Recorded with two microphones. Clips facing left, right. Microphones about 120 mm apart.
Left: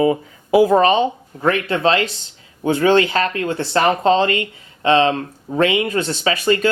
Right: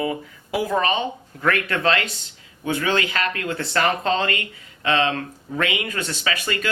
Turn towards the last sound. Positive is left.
turn(degrees=30)  # may be behind; listen again after turning